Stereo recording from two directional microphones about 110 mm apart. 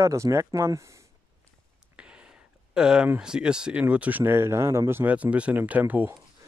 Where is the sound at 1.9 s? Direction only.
10° right (ahead or behind).